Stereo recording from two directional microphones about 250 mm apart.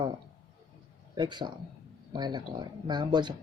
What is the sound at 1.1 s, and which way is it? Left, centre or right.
Speech, centre.